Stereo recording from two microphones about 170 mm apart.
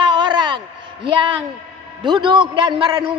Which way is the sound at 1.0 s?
30° right (ahead or behind).